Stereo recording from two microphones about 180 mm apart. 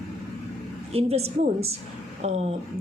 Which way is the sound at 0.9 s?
35° right (ahead or behind).